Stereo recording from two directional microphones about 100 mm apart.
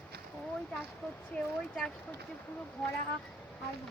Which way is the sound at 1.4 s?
10° left (ahead or behind).